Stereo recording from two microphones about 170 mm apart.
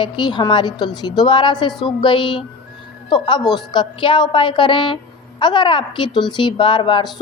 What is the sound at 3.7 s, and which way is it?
A woman's voice, 30° left (ahead or behind).